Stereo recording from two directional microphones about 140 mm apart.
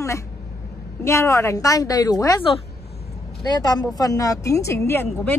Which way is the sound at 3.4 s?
30° left (ahead or behind).